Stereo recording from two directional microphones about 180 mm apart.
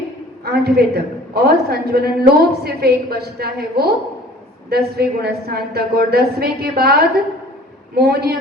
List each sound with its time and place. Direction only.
0.4 s a woman's voice: 60° right (ahead or behind)